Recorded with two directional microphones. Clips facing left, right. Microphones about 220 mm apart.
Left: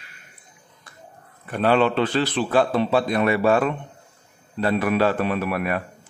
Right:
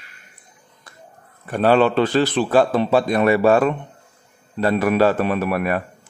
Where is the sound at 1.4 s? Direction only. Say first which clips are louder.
Right 3 dB; 40° right (ahead or behind).